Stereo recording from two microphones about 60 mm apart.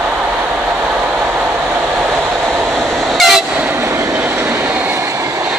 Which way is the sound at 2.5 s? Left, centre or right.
Centre.